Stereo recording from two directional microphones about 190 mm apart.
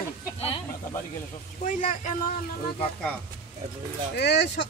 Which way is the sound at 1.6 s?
40° left (ahead or behind).